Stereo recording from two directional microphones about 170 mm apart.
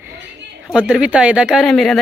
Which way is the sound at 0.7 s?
5° right (ahead or behind).